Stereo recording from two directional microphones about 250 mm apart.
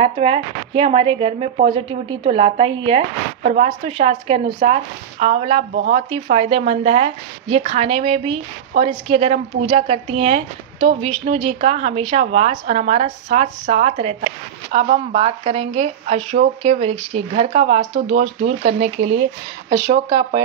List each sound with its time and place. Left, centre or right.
0.0 s a woman's voice: right